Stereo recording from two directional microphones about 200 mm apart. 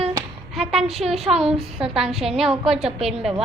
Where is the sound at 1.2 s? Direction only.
30° right (ahead or behind).